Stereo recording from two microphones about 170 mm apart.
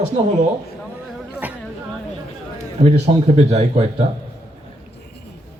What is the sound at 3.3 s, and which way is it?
Speech, 40° right (ahead or behind).